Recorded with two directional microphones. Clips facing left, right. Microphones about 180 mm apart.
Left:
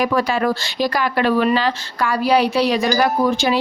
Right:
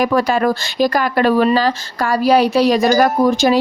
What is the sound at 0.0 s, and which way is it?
Speech, 45° right (ahead or behind).